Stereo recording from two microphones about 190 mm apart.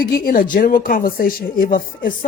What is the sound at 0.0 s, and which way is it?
Speech, 50° left (ahead or behind).